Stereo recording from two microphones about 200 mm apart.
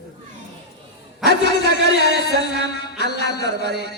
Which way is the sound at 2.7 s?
55° left (ahead or behind).